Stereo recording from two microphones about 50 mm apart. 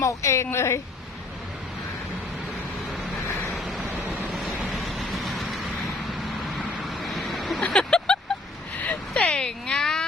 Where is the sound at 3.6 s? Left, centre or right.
Centre.